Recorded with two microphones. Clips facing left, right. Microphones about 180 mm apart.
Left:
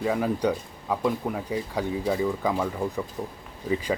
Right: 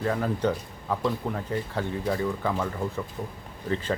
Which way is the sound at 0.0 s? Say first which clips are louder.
Left 2 dB; 10° left (ahead or behind).